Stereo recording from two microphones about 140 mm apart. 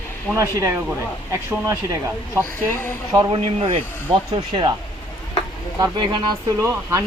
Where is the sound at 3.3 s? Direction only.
45° right (ahead or behind).